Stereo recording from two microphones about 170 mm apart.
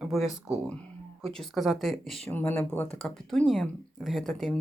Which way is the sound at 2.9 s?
5° left (ahead or behind).